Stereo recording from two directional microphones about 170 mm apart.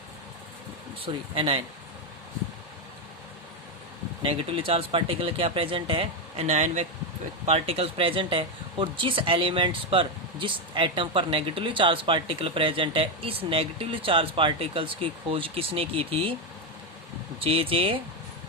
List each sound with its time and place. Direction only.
1.0 s speech: 30° right (ahead or behind)
4.2 s speech: 30° right (ahead or behind)
17.4 s speech: 35° right (ahead or behind)